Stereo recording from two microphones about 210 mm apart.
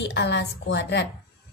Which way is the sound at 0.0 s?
55° left (ahead or behind).